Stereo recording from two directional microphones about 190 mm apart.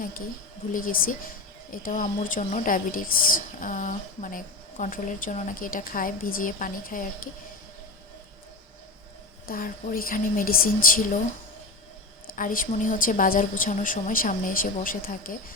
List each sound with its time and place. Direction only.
0.7 s speech: 45° left (ahead or behind)
9.5 s speech: 50° left (ahead or behind)
12.4 s speech: 45° left (ahead or behind)